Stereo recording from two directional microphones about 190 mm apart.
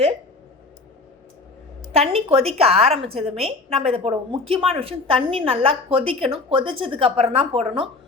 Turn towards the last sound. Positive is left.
turn(degrees=-30)  # may be behind; listen again after turning